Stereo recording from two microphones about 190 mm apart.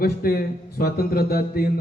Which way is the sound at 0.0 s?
50° left (ahead or behind).